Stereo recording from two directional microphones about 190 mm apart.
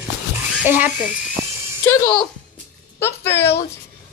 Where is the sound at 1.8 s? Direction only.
15° left (ahead or behind).